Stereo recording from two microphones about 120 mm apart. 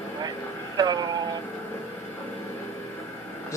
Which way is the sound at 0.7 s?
35° right (ahead or behind).